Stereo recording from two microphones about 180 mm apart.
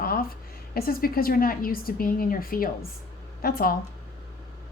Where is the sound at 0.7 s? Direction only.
55° left (ahead or behind).